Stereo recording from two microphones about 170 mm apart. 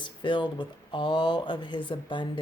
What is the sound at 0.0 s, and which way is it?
Speech, 30° left (ahead or behind).